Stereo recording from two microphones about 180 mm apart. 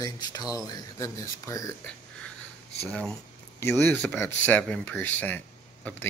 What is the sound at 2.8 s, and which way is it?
A man's voice, centre (ahead or behind).